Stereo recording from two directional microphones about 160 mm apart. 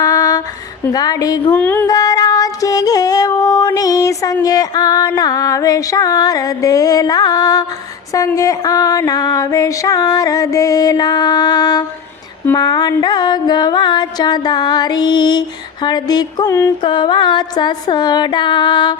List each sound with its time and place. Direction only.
0.0 s music: 20° left (ahead or behind)
1.5 s a sound: 10° left (ahead or behind)
1.9 s female singing: 25° left (ahead or behind)
4.4 s music: 25° left (ahead or behind)